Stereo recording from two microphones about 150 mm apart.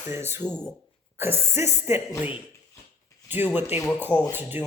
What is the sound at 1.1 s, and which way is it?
A woman's voice, 15° right (ahead or behind).